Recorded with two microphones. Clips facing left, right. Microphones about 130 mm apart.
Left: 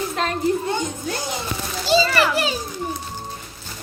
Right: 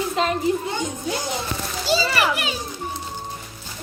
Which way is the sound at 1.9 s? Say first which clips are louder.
Left 4 dB; 25° left (ahead or behind).